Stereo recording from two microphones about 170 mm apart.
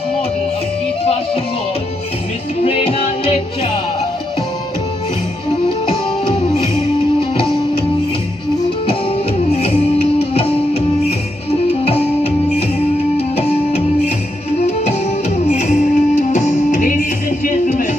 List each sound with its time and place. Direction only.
2.6 s music: 35° left (ahead or behind)
9.6 s music: 35° left (ahead or behind)
13.4 s music: 40° left (ahead or behind)
15.4 s music: 45° left (ahead or behind)